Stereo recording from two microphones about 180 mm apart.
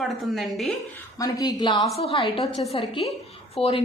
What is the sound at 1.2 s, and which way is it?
A woman's voice, 20° left (ahead or behind).